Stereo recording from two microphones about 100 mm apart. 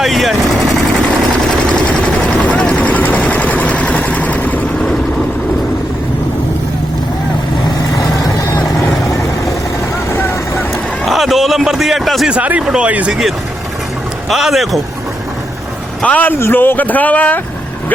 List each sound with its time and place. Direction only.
0.0 s vehicle: centre (ahead or behind)
2.2 s vehicle: 10° left (ahead or behind)
10.1 s vehicle: 25° left (ahead or behind)
11.0 s a sound: centre (ahead or behind)
12.3 s speech: 15° right (ahead or behind)
14.3 s speech: centre (ahead or behind)
16.0 s speech: 15° left (ahead or behind)